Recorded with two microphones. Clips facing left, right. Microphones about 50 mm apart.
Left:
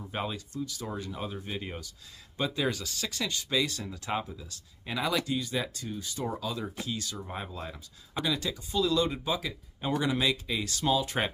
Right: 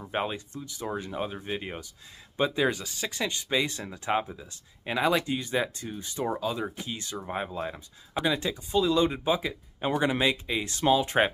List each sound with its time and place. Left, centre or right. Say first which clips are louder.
0.0 s speech: right 4 dB; right